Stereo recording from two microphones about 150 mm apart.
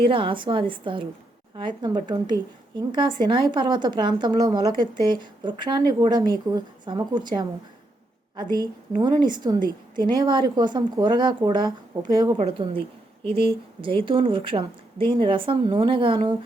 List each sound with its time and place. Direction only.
0.0 s a woman's voice: 35° right (ahead or behind)